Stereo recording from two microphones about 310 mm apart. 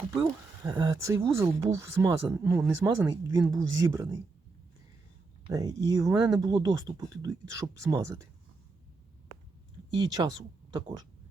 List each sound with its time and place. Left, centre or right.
0.1 s speech: centre
5.5 s speech: centre
10.2 s speech: centre